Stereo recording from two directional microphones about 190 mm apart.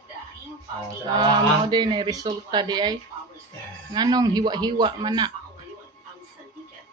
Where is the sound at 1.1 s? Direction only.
20° right (ahead or behind).